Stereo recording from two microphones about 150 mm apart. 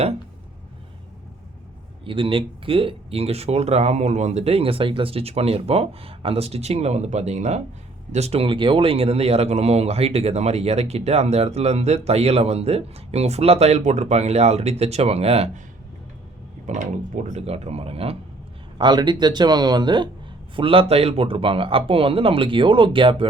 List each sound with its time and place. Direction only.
2.0 s speech: 35° right (ahead or behind)
16.6 s speech: 55° right (ahead or behind)
18.8 s speech: 30° right (ahead or behind)